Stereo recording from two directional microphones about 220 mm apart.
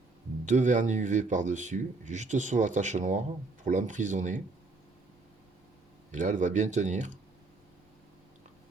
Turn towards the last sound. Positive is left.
turn(degrees=-35)  # may be behind; listen again after turning